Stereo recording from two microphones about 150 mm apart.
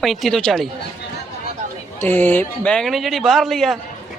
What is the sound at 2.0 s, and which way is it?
Speech, 10° left (ahead or behind).